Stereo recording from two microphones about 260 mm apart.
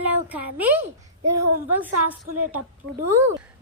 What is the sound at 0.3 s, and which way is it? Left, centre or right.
Speech, centre.